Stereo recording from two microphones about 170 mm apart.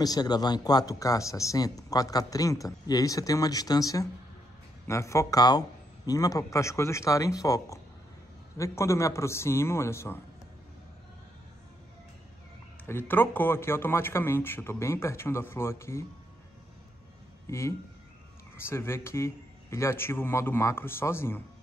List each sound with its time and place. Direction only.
0.0 s speech: 25° left (ahead or behind)
12.8 s speech: 10° left (ahead or behind)
17.5 s speech: 15° left (ahead or behind)